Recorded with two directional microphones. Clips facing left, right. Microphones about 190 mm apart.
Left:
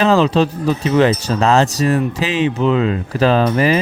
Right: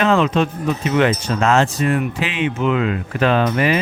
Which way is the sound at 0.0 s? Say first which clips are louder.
Left 3 dB; 35° left (ahead or behind).